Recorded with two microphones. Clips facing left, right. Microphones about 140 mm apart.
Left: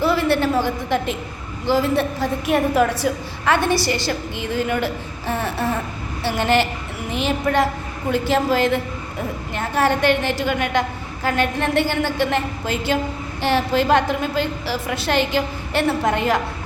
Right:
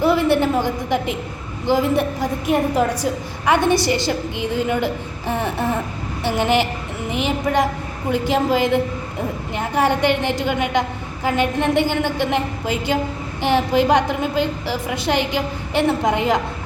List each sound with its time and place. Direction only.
0.0 s a woman's voice: 20° right (ahead or behind)